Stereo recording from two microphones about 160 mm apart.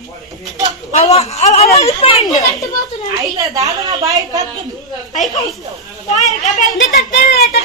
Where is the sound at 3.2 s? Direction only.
20° right (ahead or behind).